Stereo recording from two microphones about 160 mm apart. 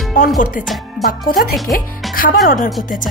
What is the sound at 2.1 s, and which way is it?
Music, 60° left (ahead or behind).